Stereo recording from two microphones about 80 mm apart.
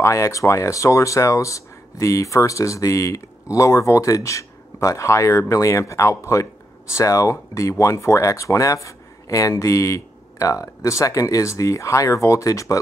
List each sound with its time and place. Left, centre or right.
0.0 s speech: left